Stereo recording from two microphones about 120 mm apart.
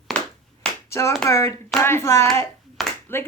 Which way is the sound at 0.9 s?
25° left (ahead or behind).